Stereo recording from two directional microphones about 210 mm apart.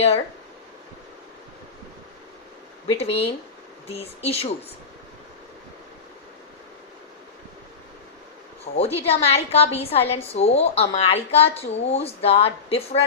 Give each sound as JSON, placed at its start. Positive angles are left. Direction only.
{"t": 2.8, "sound": "a woman's voice", "side_deg": 30}
{"t": 8.6, "sound": "a woman's voice", "side_deg": 30}